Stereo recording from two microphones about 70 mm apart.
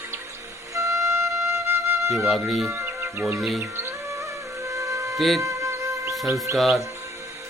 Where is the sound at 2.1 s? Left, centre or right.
Centre.